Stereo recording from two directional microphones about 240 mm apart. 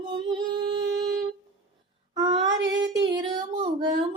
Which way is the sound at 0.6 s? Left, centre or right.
Centre.